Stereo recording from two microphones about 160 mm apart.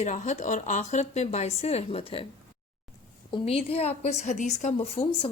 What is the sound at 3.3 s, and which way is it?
A woman's voice, 35° left (ahead or behind).